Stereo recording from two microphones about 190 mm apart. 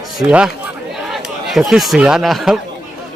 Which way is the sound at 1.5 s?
Centre (ahead or behind).